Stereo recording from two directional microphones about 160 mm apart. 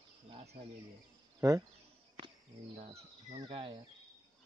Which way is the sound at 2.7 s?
45° right (ahead or behind).